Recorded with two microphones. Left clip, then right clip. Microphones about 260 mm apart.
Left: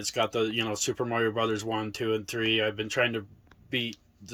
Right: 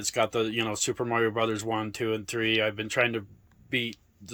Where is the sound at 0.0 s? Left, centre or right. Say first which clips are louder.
Right 1 dB; centre.